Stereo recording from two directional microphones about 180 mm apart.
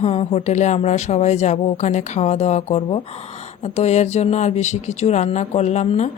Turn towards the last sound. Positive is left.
turn(degrees=40)  # may be behind; listen again after turning